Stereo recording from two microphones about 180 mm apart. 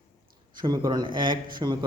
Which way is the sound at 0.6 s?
20° right (ahead or behind).